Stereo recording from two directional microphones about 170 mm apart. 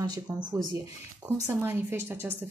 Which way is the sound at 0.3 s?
20° right (ahead or behind).